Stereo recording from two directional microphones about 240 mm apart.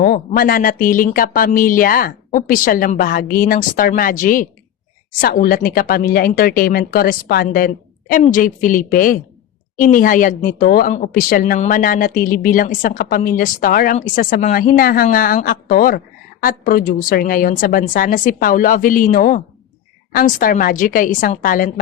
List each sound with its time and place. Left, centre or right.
0.0 s speech: left